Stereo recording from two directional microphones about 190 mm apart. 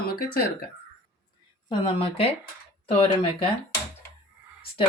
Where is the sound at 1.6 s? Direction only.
30° left (ahead or behind).